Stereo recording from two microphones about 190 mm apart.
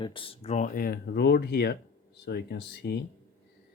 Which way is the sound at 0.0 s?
25° left (ahead or behind).